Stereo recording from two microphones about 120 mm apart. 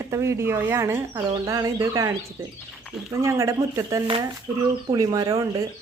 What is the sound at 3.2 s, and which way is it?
Speech, 25° right (ahead or behind).